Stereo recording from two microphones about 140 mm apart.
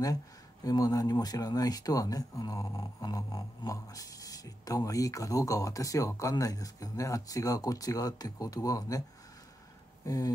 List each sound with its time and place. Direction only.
0.7 s speech: 25° left (ahead or behind)
10.0 s speech: 25° left (ahead or behind)